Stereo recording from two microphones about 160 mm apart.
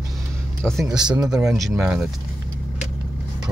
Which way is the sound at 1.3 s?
Centre (ahead or behind).